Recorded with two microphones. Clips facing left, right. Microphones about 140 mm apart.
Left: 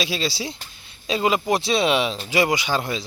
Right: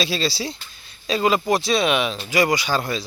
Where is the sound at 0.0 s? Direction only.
15° left (ahead or behind).